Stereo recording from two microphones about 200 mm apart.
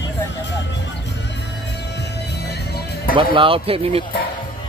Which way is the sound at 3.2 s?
25° right (ahead or behind).